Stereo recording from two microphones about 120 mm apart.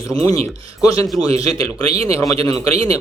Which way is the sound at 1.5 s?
55° right (ahead or behind).